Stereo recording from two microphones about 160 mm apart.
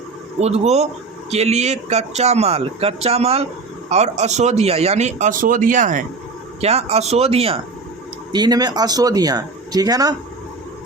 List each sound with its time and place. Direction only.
0.3 s speech: 40° right (ahead or behind)
6.6 s speech: 40° right (ahead or behind)
8.3 s speech: 25° right (ahead or behind)